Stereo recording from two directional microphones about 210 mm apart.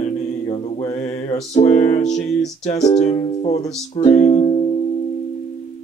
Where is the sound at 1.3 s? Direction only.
30° left (ahead or behind).